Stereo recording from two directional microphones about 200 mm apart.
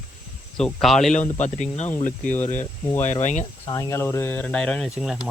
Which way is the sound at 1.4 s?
35° left (ahead or behind).